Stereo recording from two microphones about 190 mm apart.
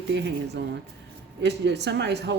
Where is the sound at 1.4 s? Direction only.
65° right (ahead or behind).